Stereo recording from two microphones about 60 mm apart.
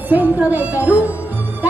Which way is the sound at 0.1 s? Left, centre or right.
Right.